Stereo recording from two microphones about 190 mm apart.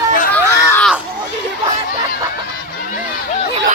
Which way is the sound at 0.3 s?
15° left (ahead or behind).